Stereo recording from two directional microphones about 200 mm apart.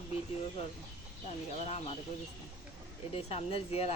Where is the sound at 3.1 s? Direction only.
30° left (ahead or behind).